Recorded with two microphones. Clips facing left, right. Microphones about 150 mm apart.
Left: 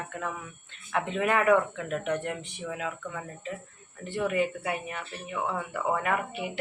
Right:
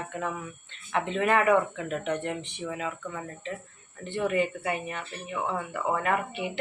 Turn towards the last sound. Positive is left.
turn(degrees=5)  # may be behind; listen again after turning